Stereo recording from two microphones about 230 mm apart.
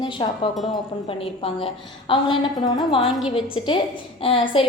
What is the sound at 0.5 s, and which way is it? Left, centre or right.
Speech, centre.